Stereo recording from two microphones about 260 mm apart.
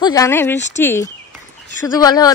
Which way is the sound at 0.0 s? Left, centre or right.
Centre.